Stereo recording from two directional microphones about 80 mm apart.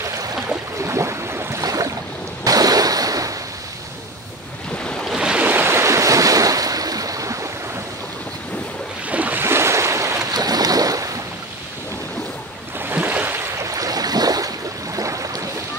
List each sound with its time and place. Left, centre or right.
0.0 s a sound: right
1.6 s boat: right
2.4 s waves: right
5.1 s waves: centre
5.5 s waves: right
9.1 s waves: centre
9.4 s waves: right
10.3 s boat: right
12.7 s boat: right
13.7 s boat: right
15.0 s a sound: right